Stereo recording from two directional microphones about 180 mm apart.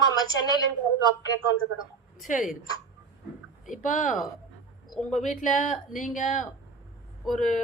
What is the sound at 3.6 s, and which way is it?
Speech, 45° left (ahead or behind).